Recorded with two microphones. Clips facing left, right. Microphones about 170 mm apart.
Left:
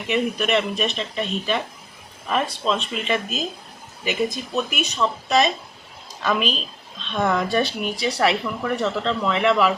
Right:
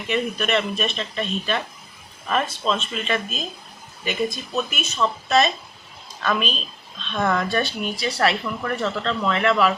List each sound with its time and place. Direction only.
0.1 s speech: 15° left (ahead or behind)
4.5 s speech: 15° left (ahead or behind)